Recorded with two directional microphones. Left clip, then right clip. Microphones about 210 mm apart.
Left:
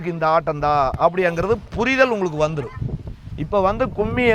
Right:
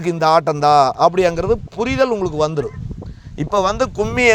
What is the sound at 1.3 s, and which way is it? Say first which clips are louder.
Speech: right 2 dB; 15° right (ahead or behind).